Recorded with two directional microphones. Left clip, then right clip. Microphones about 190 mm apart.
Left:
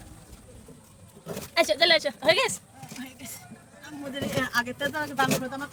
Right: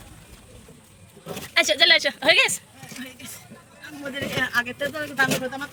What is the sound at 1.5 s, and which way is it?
A woman's voice, centre (ahead or behind).